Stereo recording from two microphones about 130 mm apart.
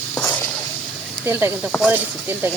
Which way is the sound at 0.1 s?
15° left (ahead or behind).